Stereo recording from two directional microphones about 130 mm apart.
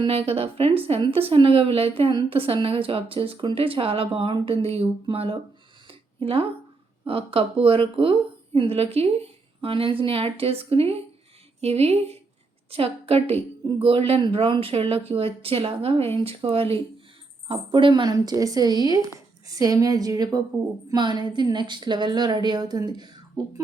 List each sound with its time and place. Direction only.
0.0 s a woman's voice: 50° right (ahead or behind)
5.9 s a sound: 45° right (ahead or behind)
7.1 s a woman's voice: 45° right (ahead or behind)